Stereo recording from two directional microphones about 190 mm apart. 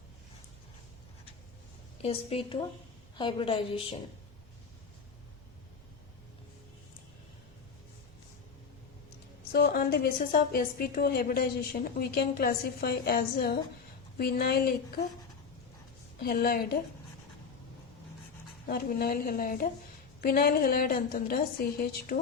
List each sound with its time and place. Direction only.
2.0 s a woman's voice: 30° left (ahead or behind)
9.5 s a woman's voice: 55° left (ahead or behind)
16.2 s a woman's voice: 50° left (ahead or behind)
18.7 s a woman's voice: 50° left (ahead or behind)